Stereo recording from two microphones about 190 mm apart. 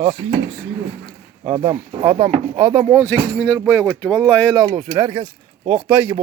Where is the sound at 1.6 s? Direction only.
25° right (ahead or behind).